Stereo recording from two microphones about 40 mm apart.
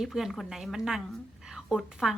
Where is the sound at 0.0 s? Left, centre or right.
Centre.